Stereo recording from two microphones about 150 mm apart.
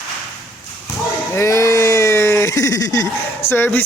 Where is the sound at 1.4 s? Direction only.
20° left (ahead or behind).